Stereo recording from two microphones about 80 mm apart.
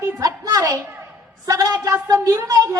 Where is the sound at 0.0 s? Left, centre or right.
Right.